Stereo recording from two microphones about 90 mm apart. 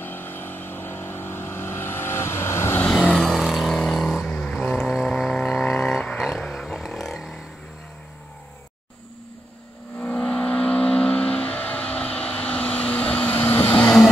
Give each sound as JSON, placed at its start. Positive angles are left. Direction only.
{"t": 0.0, "sound": "vehicle", "side_deg": 25}
{"t": 2.9, "sound": "vehicle", "side_deg": 5}
{"t": 9.9, "sound": "vehicle", "side_deg": 10}